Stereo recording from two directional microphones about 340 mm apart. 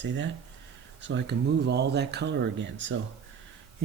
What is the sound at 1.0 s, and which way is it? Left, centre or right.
Speech, right.